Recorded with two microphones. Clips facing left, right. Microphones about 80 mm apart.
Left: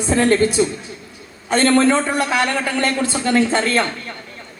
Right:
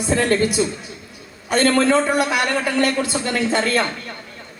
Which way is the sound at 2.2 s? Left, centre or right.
Left.